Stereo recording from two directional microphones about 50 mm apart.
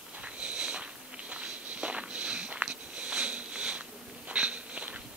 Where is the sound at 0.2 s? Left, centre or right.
Right.